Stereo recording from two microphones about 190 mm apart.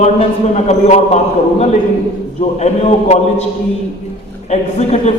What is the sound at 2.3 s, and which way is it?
A man's voice, 35° left (ahead or behind).